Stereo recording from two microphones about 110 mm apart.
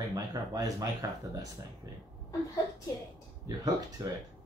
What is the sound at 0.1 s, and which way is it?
Speech, 35° right (ahead or behind).